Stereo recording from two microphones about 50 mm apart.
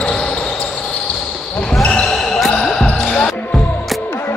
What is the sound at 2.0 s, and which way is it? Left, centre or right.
Basketball bounce, centre.